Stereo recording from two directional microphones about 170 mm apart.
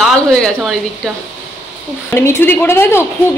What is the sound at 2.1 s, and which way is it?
Speech, 15° left (ahead or behind).